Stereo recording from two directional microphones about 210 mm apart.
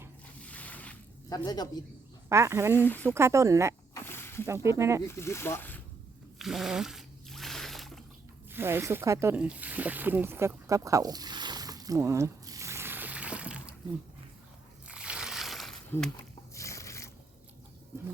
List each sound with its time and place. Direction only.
0.4 s zipper: 5° left (ahead or behind)
1.5 s a man's voice: 20° left (ahead or behind)
2.3 s speech: 15° right (ahead or behind)
2.7 s speech: 10° left (ahead or behind)
3.2 s speech: 15° right (ahead or behind)
3.9 s snake: 10° left (ahead or behind)
4.4 s speech: 15° right (ahead or behind)
5.0 s speech: 10° left (ahead or behind)
6.4 s a sound: centre (ahead or behind)
8.5 s speech: 10° right (ahead or behind)
14.8 s a sound: 5° right (ahead or behind)
15.9 s speech: 10° left (ahead or behind)
16.6 s a sound: 15° left (ahead or behind)